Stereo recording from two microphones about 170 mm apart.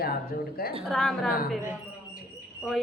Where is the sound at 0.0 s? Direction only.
60° left (ahead or behind).